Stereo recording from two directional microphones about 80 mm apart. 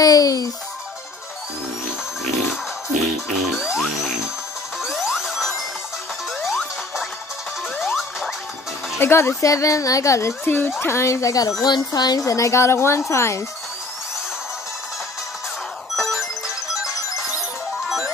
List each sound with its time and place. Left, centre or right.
0.0 s speech: left
3.5 s music: centre
4.8 s music: centre
9.0 s a woman's voice: left
9.4 s a woman's voice: left
11.6 s speech: left
12.3 s a woman's voice: left
16.0 s music: centre
17.8 s music: centre